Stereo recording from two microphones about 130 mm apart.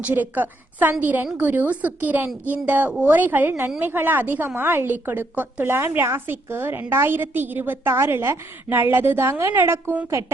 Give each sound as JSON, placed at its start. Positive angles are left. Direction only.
{"t": 0.0, "sound": "a woman's voice", "side_deg": -15}